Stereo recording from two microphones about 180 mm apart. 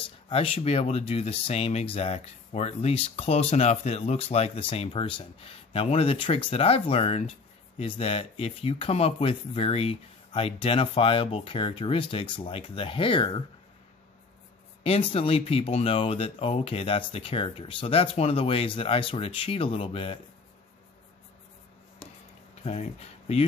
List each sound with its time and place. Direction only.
0.0 s speech: 30° left (ahead or behind)
14.8 s speech: 30° left (ahead or behind)
22.6 s speech: 35° left (ahead or behind)